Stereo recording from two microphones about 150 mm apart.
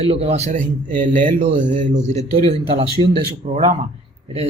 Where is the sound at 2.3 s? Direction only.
40° right (ahead or behind).